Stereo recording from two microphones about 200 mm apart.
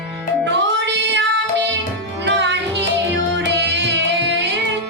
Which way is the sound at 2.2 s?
60° right (ahead or behind).